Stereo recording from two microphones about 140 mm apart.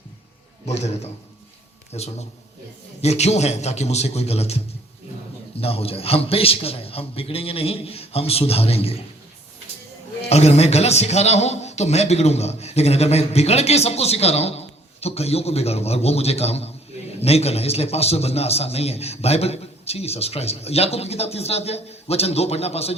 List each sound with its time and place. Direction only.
0.6 s a man's voice: 50° left (ahead or behind)
10.2 s a man's voice: 50° left (ahead or behind)